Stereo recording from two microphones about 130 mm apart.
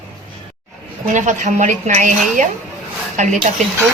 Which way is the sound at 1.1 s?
70° right (ahead or behind).